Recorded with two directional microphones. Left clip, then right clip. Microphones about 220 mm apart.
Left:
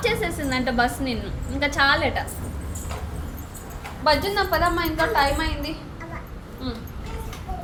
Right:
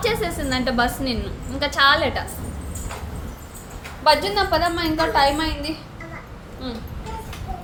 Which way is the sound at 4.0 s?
15° right (ahead or behind).